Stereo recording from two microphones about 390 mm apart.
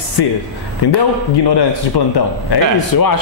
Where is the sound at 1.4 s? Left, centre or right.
Left.